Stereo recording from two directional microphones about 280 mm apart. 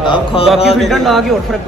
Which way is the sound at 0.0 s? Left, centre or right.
Centre.